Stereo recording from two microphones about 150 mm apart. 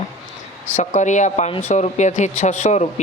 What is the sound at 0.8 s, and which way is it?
A woman's voice, 55° left (ahead or behind).